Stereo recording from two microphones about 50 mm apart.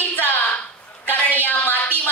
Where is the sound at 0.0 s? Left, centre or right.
Left.